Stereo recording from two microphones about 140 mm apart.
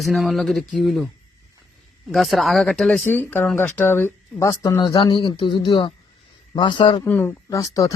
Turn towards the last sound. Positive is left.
turn(degrees=20)  # may be behind; listen again after turning